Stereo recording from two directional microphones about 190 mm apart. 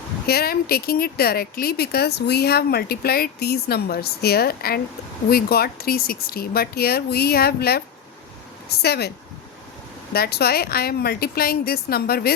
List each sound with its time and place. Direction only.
0.3 s speech: 55° left (ahead or behind)
8.8 s speech: 60° left (ahead or behind)